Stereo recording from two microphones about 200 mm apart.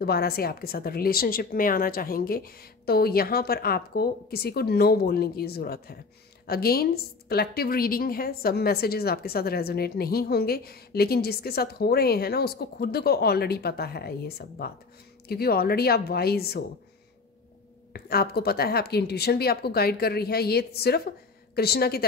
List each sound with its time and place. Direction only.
0.0 s a woman's voice: 50° left (ahead or behind)
17.9 s a woman's voice: 50° left (ahead or behind)